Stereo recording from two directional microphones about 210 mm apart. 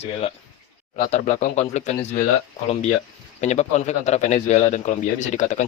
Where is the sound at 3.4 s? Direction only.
30° left (ahead or behind).